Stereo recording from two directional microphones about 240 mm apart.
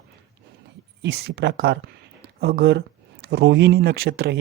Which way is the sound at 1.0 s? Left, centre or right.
Right.